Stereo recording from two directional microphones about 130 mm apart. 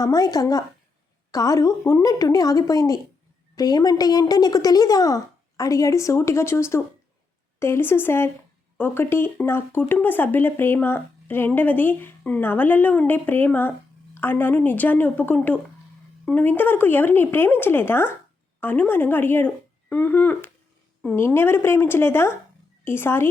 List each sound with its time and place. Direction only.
0.0 s a woman's voice: 30° left (ahead or behind)